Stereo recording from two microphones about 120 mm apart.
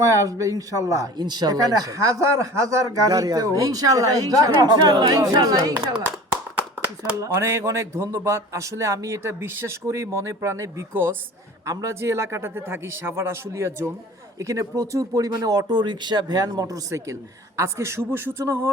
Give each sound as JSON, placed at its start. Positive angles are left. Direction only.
{"t": 0.0, "sound": "speech", "side_deg": -25}
{"t": 7.2, "sound": "speech", "side_deg": -25}
{"t": 11.6, "sound": "speech", "side_deg": -30}